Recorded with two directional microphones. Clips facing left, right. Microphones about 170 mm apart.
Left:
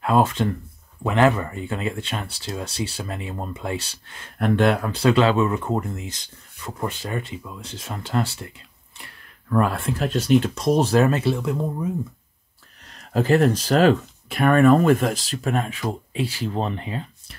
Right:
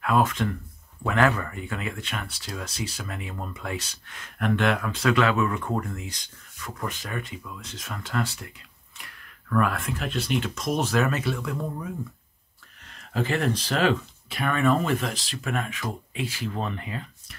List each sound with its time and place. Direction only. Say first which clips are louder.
0.0 s speech: left 4 dB; 30° left (ahead or behind)
12.8 s speech: left 6 dB; 40° left (ahead or behind)